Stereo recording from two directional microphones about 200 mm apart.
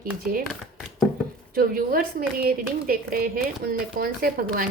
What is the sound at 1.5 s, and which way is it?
A woman's voice, 50° right (ahead or behind).